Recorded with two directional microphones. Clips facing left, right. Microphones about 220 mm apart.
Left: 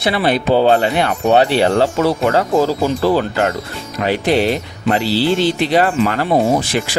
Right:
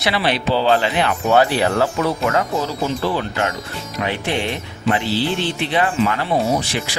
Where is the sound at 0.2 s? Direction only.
50° left (ahead or behind).